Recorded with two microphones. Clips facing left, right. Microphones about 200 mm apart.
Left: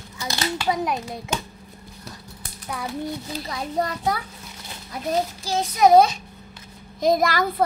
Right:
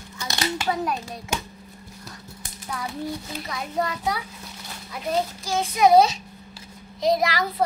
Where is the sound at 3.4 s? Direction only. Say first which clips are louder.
Left 2 dB; 30° left (ahead or behind).